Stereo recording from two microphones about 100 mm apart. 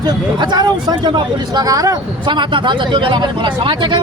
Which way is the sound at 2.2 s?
50° right (ahead or behind).